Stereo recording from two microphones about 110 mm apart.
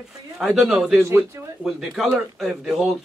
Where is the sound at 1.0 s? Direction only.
20° right (ahead or behind).